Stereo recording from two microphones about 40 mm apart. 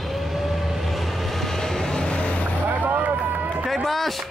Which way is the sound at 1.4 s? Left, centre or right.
Centre.